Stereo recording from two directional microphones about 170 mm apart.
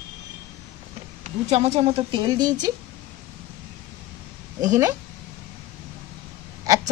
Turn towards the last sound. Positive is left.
turn(degrees=-20)  # may be behind; listen again after turning